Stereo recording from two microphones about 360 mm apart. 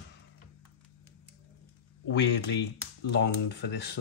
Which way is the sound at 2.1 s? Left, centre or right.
Left.